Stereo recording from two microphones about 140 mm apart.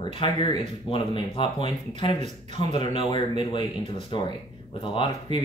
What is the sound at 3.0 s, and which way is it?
Speech, 35° left (ahead or behind).